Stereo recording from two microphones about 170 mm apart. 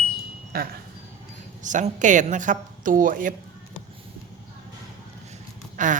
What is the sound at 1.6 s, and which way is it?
Speech, 45° right (ahead or behind).